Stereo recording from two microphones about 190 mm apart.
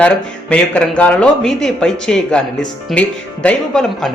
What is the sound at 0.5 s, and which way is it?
Speech, 5° left (ahead or behind).